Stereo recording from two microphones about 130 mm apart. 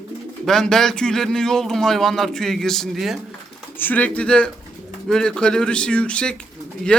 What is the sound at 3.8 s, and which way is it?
Speech, 15° left (ahead or behind).